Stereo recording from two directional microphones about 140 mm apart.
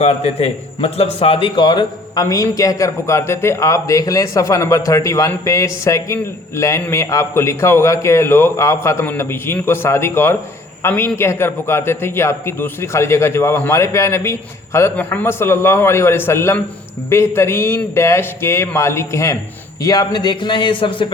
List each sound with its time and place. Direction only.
0.0 s a man's voice: 45° left (ahead or behind)